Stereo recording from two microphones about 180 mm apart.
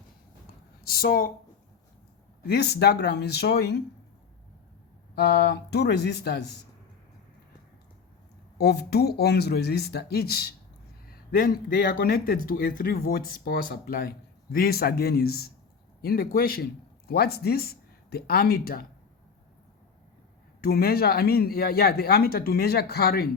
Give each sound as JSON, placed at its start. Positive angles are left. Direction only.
{"t": 0.9, "sound": "speech", "side_deg": 55}
{"t": 2.5, "sound": "speech", "side_deg": 65}
{"t": 5.1, "sound": "speech", "side_deg": 65}
{"t": 8.5, "sound": "speech", "side_deg": 65}
{"t": 20.6, "sound": "speech", "side_deg": 60}